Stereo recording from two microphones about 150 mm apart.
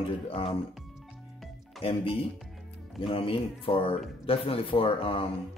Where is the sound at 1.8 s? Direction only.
35° left (ahead or behind).